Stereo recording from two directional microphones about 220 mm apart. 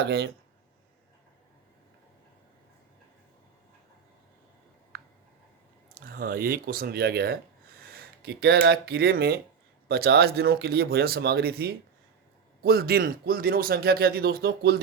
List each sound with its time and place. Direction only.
0.0 s speech: 45° right (ahead or behind)
5.9 s speech: 40° right (ahead or behind)